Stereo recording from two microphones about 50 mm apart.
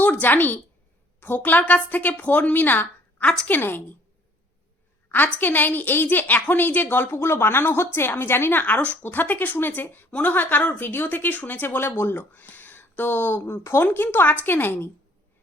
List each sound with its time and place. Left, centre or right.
0.0 s speech: left
5.0 s a sound: left
5.4 s speech: left
8.6 s speech: left
10.8 s speech: left
11.1 s speech: left
13.4 s speech: left
13.8 s speech: left